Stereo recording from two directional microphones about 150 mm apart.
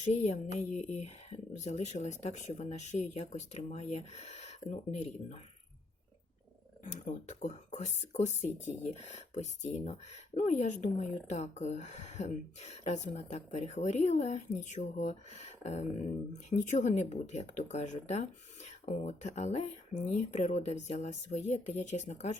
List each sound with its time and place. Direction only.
0.0 s speech: 50° left (ahead or behind)
6.8 s speech: 55° left (ahead or behind)